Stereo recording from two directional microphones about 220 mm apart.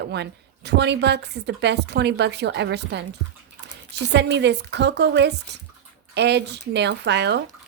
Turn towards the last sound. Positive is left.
turn(degrees=-50)  # may be behind; listen again after turning